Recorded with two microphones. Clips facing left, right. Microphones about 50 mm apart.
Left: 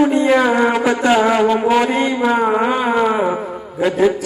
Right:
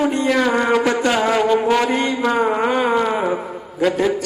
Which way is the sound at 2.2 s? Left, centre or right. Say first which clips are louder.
Left 2 dB; centre.